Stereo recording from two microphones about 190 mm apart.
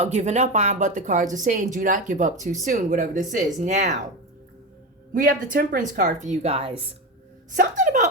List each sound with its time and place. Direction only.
0.0 s speech: 35° right (ahead or behind)
5.1 s speech: 45° right (ahead or behind); by 6.7 s 30° right (ahead or behind)
7.5 s speech: 45° right (ahead or behind)